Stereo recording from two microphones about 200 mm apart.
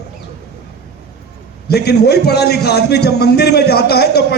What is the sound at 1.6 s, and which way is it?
A man's voice, 55° left (ahead or behind).